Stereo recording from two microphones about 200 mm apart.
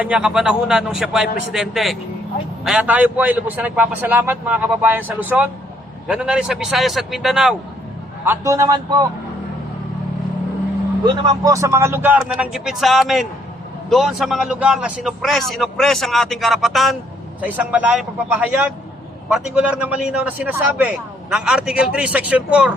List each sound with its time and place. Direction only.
0.0 s a man's voice: 5° right (ahead or behind)
8.2 s a man's voice: 10° right (ahead or behind)
11.0 s a man's voice: 15° right (ahead or behind)